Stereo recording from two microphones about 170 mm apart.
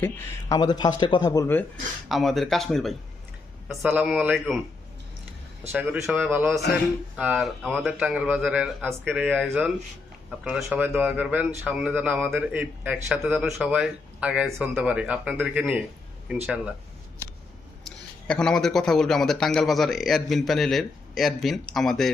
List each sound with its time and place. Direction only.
0.0 s speech: 15° left (ahead or behind)
2.0 s speech: centre (ahead or behind)
5.7 s a man's voice: 5° right (ahead or behind)
17.8 s speech: 5° left (ahead or behind)